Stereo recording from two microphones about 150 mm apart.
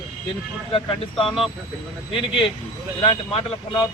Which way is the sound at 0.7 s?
40° left (ahead or behind).